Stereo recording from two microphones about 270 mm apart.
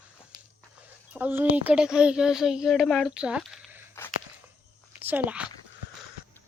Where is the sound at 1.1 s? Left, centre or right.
Centre.